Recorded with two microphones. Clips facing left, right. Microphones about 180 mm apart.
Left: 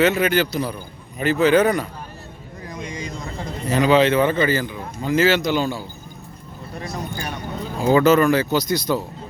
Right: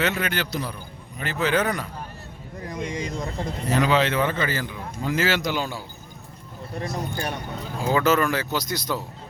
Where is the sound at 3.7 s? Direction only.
Centre (ahead or behind).